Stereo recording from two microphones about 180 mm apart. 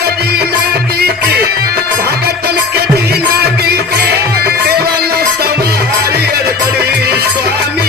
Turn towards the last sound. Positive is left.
turn(degrees=-65)  # may be behind; listen again after turning